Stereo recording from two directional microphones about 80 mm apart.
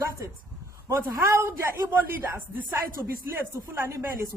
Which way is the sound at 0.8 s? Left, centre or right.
Right.